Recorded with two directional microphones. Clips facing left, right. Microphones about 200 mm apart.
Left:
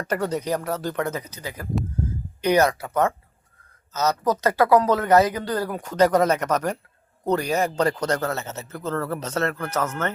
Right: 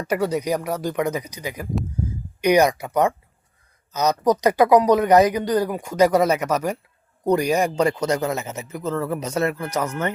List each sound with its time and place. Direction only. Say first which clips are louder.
0.1 s speech: right 3 dB; 10° right (ahead or behind)